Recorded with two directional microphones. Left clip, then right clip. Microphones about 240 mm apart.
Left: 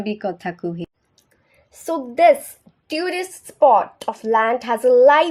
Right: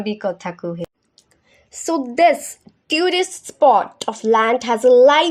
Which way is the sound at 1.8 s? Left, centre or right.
Right.